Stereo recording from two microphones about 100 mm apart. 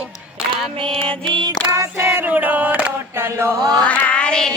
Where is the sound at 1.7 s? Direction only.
30° right (ahead or behind).